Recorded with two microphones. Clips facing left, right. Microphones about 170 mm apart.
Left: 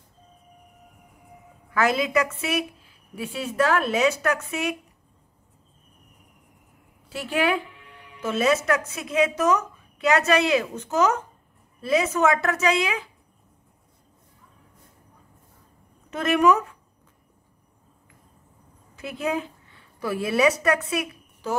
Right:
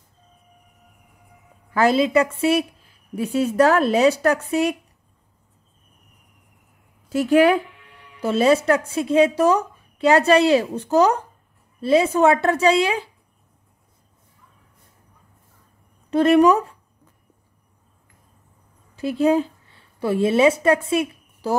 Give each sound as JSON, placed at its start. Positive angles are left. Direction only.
{"t": 1.7, "sound": "a woman's voice", "side_deg": -30}
{"t": 3.2, "sound": "a woman's voice", "side_deg": -45}
{"t": 7.1, "sound": "a woman's voice", "side_deg": -45}
{"t": 16.1, "sound": "a woman's voice", "side_deg": -35}
{"t": 18.9, "sound": "a woman's voice", "side_deg": -30}